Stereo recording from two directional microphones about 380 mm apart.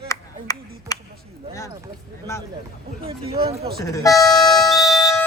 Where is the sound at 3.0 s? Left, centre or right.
Centre.